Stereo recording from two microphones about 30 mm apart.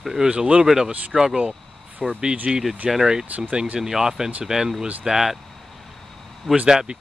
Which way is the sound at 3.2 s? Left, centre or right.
Right.